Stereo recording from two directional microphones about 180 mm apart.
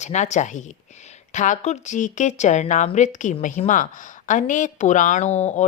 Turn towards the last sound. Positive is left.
turn(degrees=40)  # may be behind; listen again after turning